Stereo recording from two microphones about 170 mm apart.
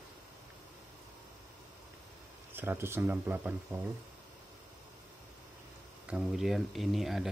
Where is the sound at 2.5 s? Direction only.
10° right (ahead or behind).